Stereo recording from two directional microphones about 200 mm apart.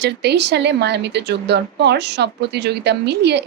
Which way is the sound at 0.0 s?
55° right (ahead or behind).